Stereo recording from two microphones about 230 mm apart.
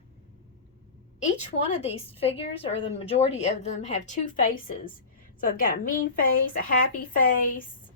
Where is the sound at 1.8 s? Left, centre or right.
Left.